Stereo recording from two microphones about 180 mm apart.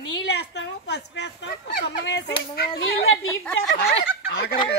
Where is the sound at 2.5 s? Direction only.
60° left (ahead or behind).